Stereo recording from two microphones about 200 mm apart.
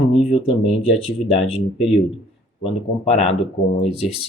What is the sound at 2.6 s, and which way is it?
Speech, 30° left (ahead or behind).